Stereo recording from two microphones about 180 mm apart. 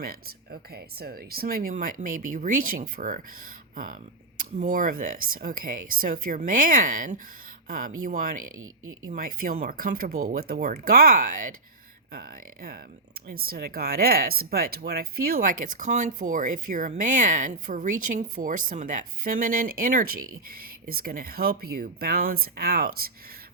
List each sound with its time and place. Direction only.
0.0 s speech: 55° right (ahead or behind)
4.4 s speech: 45° right (ahead or behind)